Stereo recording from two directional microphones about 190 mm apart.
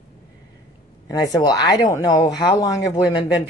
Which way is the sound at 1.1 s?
20° left (ahead or behind).